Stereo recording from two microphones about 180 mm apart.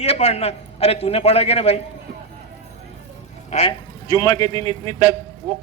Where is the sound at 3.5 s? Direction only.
35° left (ahead or behind).